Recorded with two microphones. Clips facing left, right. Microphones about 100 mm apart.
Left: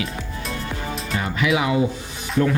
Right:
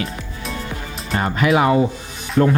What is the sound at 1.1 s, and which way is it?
Speech, 45° right (ahead or behind).